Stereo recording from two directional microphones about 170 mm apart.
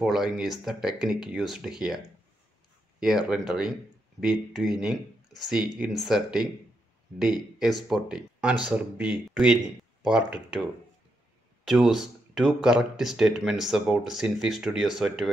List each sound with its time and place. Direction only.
0.0 s speech: centre (ahead or behind)
3.0 s speech: 5° right (ahead or behind)